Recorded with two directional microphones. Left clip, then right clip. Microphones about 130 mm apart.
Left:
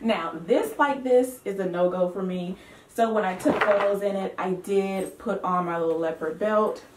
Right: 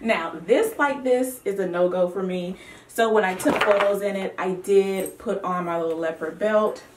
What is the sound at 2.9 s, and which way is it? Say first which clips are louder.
Speech: right 4 dB; 10° right (ahead or behind).